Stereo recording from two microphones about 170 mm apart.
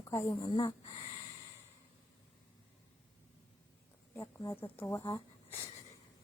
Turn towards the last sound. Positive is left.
turn(degrees=15)  # may be behind; listen again after turning